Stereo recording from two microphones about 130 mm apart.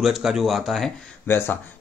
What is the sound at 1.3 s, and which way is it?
Speech, 20° left (ahead or behind).